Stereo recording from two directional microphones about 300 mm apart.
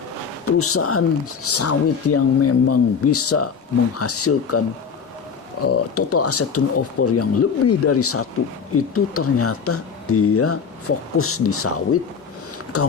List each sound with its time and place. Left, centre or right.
0.4 s speech: left
5.6 s speech: left